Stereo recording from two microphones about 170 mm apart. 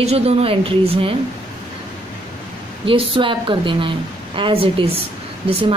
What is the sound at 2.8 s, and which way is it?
A woman's voice, 30° right (ahead or behind).